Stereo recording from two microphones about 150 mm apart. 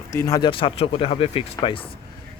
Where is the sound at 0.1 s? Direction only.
20° left (ahead or behind).